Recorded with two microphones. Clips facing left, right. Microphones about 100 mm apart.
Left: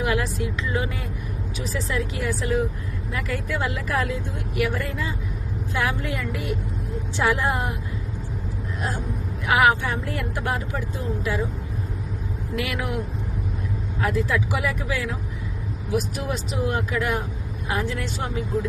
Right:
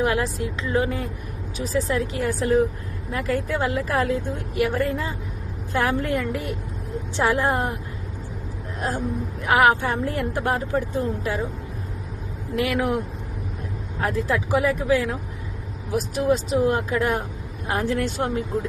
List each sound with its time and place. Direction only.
0.0 s a woman's voice: 30° right (ahead or behind)
4.7 s a woman's voice: 45° right (ahead or behind)
9.5 s a woman's voice: 40° right (ahead or behind)
12.5 s a woman's voice: 35° right (ahead or behind)
14.0 s a woman's voice: 35° right (ahead or behind)
17.7 s speech: 45° right (ahead or behind)